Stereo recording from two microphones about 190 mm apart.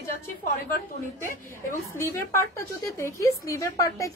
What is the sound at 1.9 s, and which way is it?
A woman's voice, 15° left (ahead or behind).